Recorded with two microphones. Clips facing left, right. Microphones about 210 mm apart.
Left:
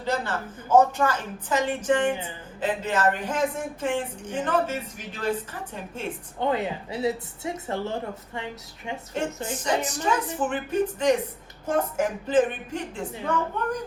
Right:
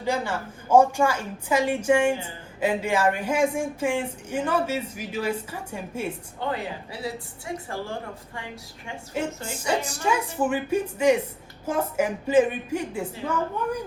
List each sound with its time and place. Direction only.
0.0 s speech: 10° right (ahead or behind)
6.5 s a woman's voice: 20° left (ahead or behind)
9.1 s speech: 10° right (ahead or behind)